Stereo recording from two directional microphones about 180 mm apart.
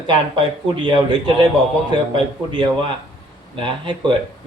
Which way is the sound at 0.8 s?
25° right (ahead or behind).